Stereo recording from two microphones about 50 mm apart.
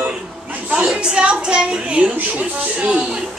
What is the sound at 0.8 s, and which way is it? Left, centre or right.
A woman's voice, centre.